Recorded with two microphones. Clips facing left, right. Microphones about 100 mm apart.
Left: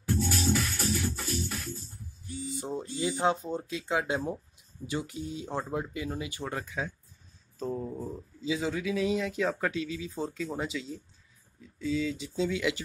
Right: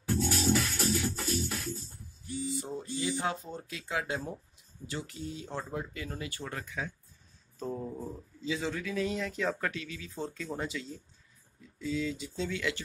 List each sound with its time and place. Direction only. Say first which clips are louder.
0.2 s music: right 2 dB; centre (ahead or behind)
2.6 s speech: left 3 dB; 25° left (ahead or behind)
7.5 s speech: left 3 dB; 5° right (ahead or behind)
9.7 s speech: left 6 dB; 20° left (ahead or behind)
10.1 s speech: left 1 dB; 5° left (ahead or behind)
12.4 s speech: left 6 dB; 15° left (ahead or behind)